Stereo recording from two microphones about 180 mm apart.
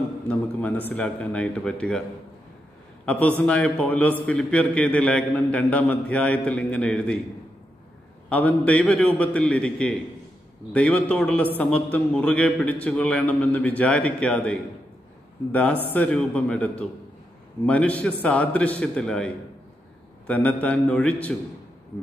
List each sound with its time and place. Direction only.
0.3 s a man's voice: 10° left (ahead or behind)
3.1 s a man's voice: 10° left (ahead or behind)
8.3 s a man's voice: 10° left (ahead or behind)